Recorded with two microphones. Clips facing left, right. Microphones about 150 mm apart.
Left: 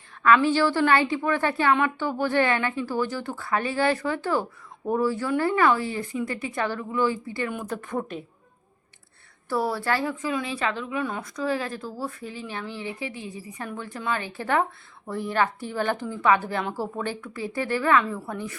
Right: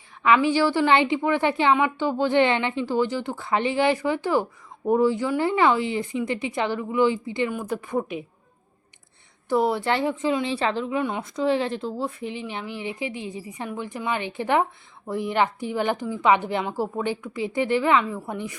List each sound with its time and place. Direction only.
0.2 s speech: 15° right (ahead or behind)
7.5 s speech: 10° right (ahead or behind)
9.5 s speech: 20° right (ahead or behind)